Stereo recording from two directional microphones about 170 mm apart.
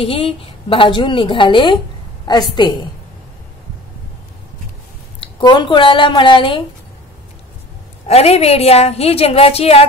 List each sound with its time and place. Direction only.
0.0 s a woman's voice: 35° left (ahead or behind)
5.2 s speech: 25° left (ahead or behind)
8.1 s a woman's voice: 35° left (ahead or behind)